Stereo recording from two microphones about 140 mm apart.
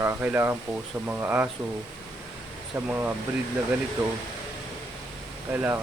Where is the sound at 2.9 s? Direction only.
15° right (ahead or behind).